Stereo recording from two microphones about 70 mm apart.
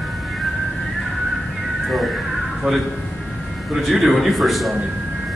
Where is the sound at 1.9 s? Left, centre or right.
Centre.